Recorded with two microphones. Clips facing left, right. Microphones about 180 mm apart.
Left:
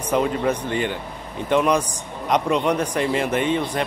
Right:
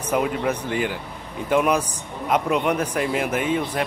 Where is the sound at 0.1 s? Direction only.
5° right (ahead or behind).